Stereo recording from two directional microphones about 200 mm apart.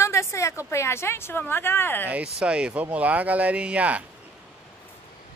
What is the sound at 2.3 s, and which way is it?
Speech, 5° right (ahead or behind).